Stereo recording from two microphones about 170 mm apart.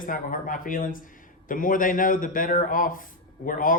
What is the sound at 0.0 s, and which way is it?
A man's voice, 50° left (ahead or behind).